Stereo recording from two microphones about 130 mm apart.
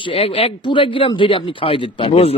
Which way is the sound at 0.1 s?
45° left (ahead or behind).